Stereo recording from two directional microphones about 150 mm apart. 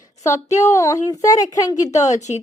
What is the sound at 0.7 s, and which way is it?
Speech, 20° left (ahead or behind).